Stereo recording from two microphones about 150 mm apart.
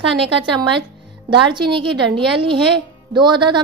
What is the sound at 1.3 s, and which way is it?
A woman's voice, 30° right (ahead or behind).